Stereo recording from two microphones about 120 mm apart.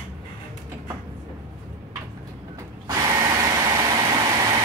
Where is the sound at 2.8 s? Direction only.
30° right (ahead or behind).